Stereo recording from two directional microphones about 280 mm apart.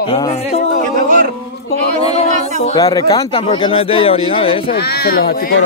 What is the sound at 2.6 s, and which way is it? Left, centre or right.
Speech, centre.